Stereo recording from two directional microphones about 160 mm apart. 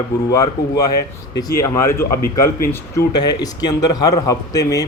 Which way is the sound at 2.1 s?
65° left (ahead or behind).